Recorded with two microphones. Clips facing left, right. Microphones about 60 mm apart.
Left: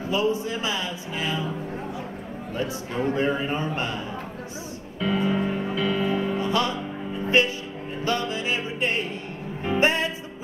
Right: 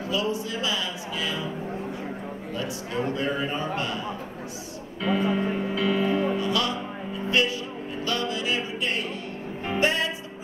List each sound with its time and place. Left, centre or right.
0.0 s a man's voice: left
2.5 s a man's voice: left
5.0 s music: centre
6.4 s music: left